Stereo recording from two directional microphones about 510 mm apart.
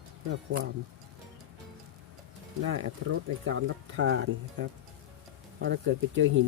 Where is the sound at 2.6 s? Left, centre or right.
Right.